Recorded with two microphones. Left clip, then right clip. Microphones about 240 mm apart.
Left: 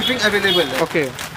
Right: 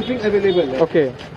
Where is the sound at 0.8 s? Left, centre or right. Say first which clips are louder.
Right 3 dB; centre.